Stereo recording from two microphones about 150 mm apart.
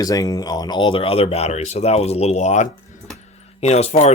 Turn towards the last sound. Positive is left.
turn(degrees=45)  # may be behind; listen again after turning